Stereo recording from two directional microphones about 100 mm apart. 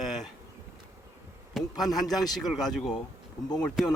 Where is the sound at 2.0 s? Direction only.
40° left (ahead or behind).